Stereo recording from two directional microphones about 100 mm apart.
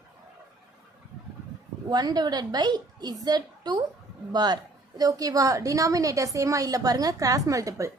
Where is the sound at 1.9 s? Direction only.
45° right (ahead or behind).